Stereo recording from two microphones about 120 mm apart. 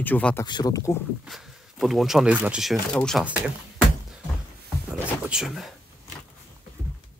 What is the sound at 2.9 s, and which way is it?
Speech, 5° left (ahead or behind).